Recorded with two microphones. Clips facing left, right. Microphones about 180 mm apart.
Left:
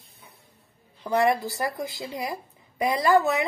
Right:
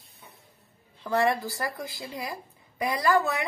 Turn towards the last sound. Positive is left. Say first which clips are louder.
# left 4 dB
turn(degrees=20)  # may be behind; listen again after turning